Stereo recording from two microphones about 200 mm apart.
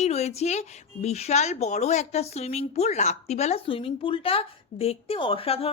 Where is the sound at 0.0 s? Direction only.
35° left (ahead or behind).